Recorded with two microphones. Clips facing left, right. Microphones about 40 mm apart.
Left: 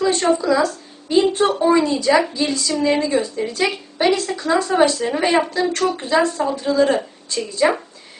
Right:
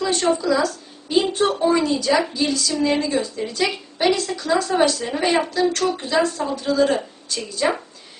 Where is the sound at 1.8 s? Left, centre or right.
Left.